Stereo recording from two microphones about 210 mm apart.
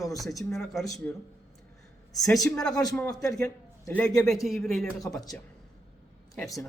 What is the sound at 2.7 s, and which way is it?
Speech, 15° left (ahead or behind).